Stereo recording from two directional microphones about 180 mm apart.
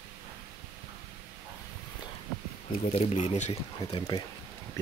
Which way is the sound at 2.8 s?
35° left (ahead or behind).